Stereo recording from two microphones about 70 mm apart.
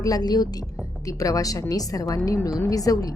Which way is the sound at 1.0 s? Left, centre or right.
Left.